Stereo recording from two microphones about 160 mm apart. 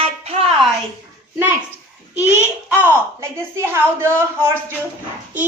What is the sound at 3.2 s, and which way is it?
A woman's voice, 15° right (ahead or behind).